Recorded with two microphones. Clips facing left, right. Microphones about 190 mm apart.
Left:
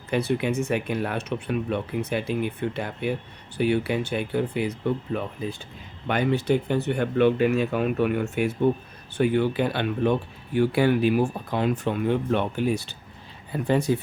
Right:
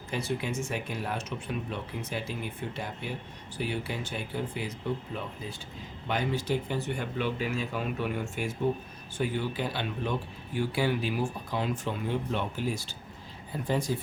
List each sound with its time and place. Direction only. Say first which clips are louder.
0.1 s speech: left 8 dB; 65° left (ahead or behind)
6.1 s speech: left 7 dB; 60° left (ahead or behind)